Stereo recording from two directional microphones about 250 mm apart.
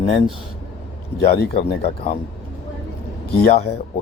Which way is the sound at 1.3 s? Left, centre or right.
Left.